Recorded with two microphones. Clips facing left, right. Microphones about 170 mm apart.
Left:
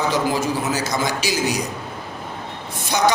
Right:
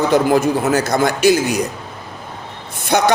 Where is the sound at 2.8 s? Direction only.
60° right (ahead or behind).